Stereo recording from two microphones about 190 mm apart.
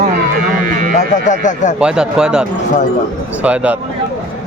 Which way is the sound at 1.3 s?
40° left (ahead or behind).